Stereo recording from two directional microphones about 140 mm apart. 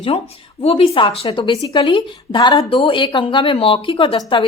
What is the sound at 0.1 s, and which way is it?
A woman's voice, 40° left (ahead or behind).